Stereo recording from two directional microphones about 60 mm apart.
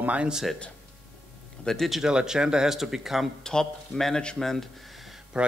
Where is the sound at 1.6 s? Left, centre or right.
Centre.